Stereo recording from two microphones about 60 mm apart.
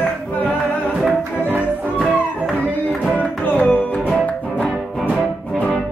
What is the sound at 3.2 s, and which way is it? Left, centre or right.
Music, left.